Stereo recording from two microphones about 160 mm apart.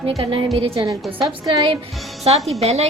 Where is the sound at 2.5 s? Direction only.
40° right (ahead or behind).